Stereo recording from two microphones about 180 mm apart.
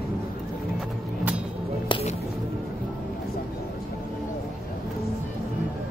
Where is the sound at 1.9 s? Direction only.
35° left (ahead or behind).